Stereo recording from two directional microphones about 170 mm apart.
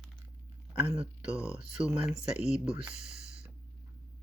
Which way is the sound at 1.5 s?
5° right (ahead or behind).